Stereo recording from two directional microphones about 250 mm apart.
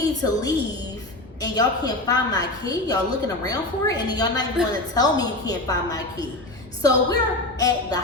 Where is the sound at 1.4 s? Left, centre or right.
Centre.